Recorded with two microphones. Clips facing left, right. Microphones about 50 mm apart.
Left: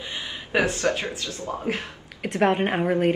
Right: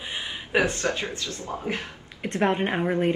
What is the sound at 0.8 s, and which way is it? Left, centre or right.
Speech, left.